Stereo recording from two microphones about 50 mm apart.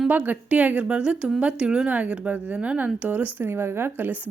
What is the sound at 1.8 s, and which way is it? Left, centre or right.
Speech, right.